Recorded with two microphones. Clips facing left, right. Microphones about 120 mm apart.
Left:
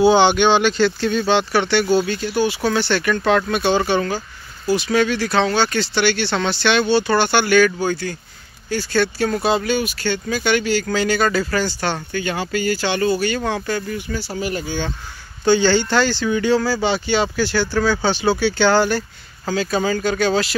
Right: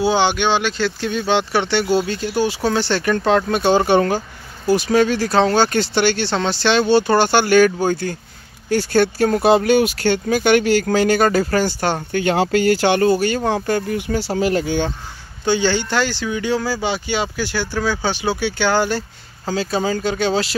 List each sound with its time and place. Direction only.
0.0 s speech: centre (ahead or behind)
1.0 s speech: 15° right (ahead or behind); by 12.2 s 45° right (ahead or behind)
12.2 s speech: 65° right (ahead or behind); by 13.4 s 45° right (ahead or behind)
13.4 s speech: 30° right (ahead or behind)
13.7 s speech: 55° right (ahead or behind); by 14.8 s 85° right
15.4 s speech: 15° right (ahead or behind)
18.9 s speech: 25° right (ahead or behind)